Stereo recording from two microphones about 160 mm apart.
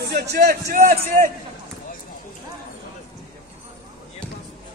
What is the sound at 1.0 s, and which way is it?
Speech, 60° right (ahead or behind).